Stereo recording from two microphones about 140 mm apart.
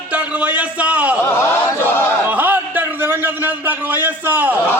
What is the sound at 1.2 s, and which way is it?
Chant, 20° left (ahead or behind).